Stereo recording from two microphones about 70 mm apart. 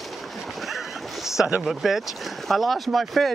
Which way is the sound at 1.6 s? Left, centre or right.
Centre.